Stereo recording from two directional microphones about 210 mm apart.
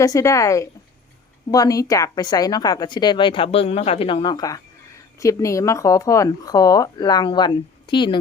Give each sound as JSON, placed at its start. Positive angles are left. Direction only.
{"t": 0.0, "sound": "a woman's voice", "side_deg": 15}